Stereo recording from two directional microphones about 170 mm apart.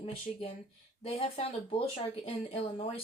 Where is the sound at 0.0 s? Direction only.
35° left (ahead or behind).